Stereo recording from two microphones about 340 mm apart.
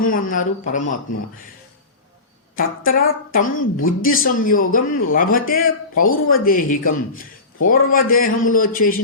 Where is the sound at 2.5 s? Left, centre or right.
Left.